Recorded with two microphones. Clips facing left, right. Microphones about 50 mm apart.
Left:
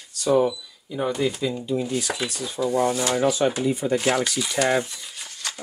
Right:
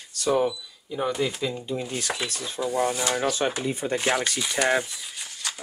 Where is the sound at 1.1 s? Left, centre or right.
Centre.